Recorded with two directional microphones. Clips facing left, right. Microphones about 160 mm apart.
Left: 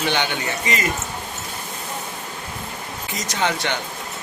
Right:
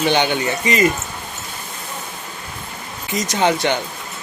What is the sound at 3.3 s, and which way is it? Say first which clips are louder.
Speech: right 6 dB; 15° right (ahead or behind).